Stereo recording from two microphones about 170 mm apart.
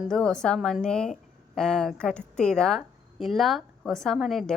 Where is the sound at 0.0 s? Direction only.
5° left (ahead or behind).